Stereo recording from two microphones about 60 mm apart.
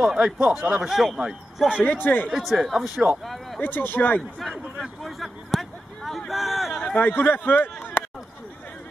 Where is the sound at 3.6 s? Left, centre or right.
Left.